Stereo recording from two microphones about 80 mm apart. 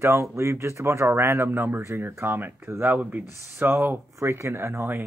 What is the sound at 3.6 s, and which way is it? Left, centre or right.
Speech, right.